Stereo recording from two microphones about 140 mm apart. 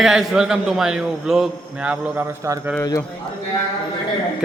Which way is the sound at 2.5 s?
20° right (ahead or behind).